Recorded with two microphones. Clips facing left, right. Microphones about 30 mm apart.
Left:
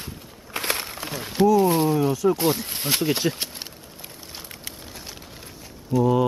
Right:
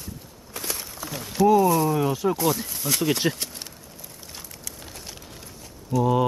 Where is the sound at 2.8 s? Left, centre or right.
Left.